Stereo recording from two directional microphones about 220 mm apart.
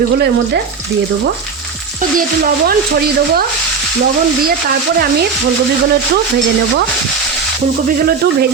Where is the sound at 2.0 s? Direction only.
40° right (ahead or behind).